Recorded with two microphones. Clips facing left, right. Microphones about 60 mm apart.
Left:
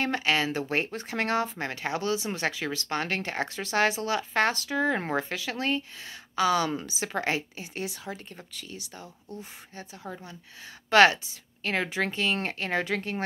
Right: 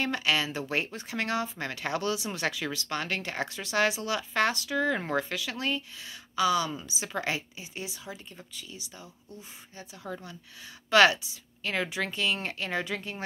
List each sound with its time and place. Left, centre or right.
0.0 s speech: left
10.9 s speech: left